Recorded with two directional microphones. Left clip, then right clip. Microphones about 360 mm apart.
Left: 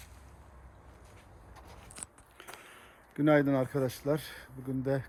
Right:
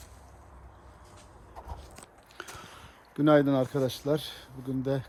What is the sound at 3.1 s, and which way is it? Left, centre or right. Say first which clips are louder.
Speech: right 3 dB; centre.